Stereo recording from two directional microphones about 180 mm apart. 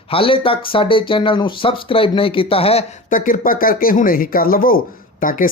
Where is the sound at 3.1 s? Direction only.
50° left (ahead or behind).